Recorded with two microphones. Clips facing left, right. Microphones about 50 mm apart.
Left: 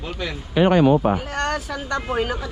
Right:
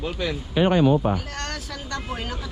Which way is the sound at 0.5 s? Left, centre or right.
Left.